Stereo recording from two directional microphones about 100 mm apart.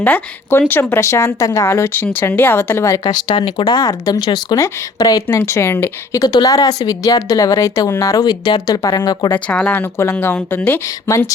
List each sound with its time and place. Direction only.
0.0 s speech: 20° left (ahead or behind); by 5.4 s 40° left (ahead or behind)
5.5 s speech: 25° left (ahead or behind)
6.1 s speech: 40° left (ahead or behind)
9.3 s speech: 15° left (ahead or behind)
10.8 s speech: 30° left (ahead or behind)